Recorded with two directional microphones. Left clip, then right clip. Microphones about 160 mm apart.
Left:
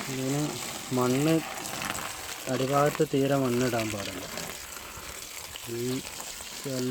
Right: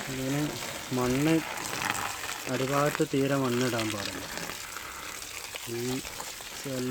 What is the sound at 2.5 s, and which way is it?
Speech, 5° left (ahead or behind).